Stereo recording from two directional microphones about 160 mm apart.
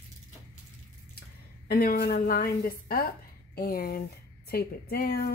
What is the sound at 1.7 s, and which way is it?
A woman's voice, 65° left (ahead or behind).